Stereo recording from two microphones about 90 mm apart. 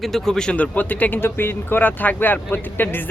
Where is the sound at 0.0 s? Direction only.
5° left (ahead or behind).